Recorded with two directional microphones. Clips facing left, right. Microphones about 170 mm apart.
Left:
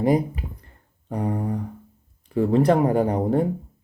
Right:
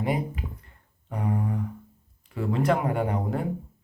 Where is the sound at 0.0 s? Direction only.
35° left (ahead or behind).